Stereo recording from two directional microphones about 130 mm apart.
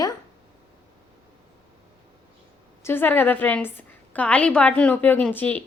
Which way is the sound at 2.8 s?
15° left (ahead or behind).